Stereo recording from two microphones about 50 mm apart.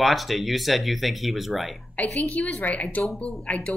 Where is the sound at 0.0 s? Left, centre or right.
Centre.